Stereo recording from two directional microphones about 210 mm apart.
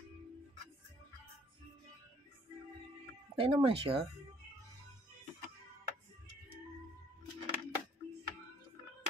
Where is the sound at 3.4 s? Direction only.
25° right (ahead or behind).